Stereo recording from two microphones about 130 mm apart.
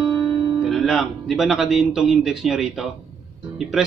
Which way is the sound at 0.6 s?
Centre (ahead or behind).